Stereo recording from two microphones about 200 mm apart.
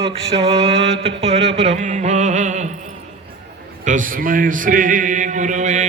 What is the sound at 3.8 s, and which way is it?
A man's voice, 40° right (ahead or behind).